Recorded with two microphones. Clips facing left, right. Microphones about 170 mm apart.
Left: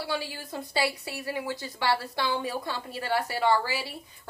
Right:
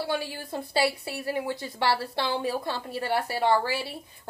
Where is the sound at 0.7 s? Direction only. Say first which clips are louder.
Right 3 dB; 25° right (ahead or behind).